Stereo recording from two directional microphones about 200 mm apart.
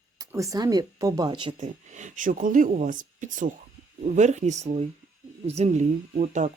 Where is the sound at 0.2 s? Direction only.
15° right (ahead or behind).